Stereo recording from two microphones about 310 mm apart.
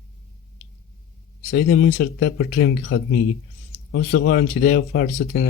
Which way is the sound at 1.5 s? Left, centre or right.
Left.